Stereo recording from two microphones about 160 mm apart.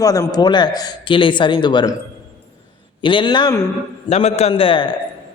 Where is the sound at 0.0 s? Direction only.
20° left (ahead or behind).